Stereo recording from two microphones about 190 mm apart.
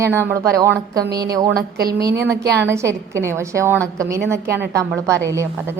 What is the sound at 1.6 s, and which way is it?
Speech, 55° right (ahead or behind).